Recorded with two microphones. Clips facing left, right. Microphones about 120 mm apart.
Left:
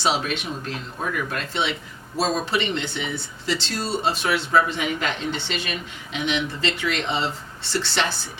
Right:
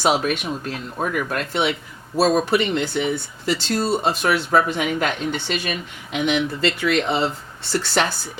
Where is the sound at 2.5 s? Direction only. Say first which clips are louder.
Right 5 dB; 50° right (ahead or behind).